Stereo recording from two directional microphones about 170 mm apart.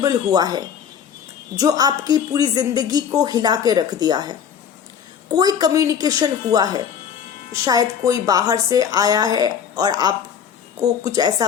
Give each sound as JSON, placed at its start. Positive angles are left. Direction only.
{"t": 0.0, "sound": "a woman's voice", "side_deg": -20}